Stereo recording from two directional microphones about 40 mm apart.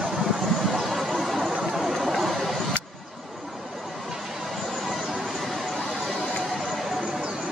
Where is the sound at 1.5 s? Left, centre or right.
Centre.